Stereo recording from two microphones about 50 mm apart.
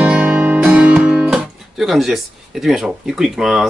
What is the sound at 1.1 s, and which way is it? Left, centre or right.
Guitar, centre.